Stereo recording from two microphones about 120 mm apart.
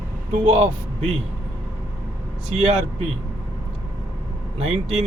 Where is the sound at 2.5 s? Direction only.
65° right (ahead or behind).